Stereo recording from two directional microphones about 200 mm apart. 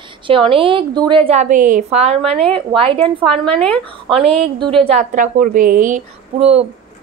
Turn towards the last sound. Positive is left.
turn(degrees=-30)  # may be behind; listen again after turning